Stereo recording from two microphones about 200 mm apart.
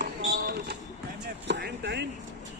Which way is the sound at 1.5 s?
55° right (ahead or behind).